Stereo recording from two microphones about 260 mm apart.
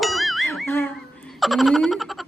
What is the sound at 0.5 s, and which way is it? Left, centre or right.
Speech, centre.